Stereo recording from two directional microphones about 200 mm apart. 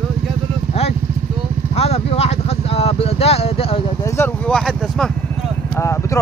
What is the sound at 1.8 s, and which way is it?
Vehicle, 30° left (ahead or behind).